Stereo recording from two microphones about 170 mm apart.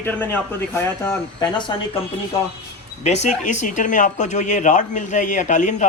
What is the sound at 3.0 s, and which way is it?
A man's voice, 40° left (ahead or behind).